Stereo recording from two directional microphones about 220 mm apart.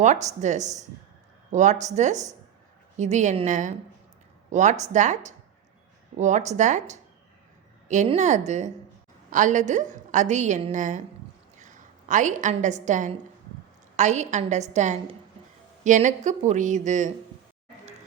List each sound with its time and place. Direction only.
0.0 s a woman's voice: 30° right (ahead or behind)